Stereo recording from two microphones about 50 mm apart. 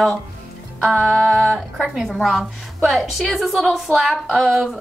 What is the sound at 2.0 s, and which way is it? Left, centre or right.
A woman's voice, centre.